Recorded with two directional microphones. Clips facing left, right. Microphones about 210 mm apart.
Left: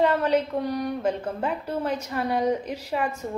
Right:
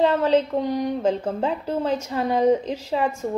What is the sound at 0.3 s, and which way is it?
A woman's voice, 20° right (ahead or behind).